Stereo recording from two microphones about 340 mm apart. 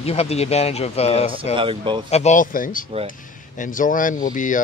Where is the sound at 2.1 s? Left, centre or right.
Centre.